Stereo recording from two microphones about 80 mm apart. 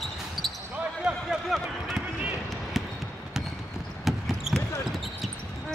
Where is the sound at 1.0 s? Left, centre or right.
Centre.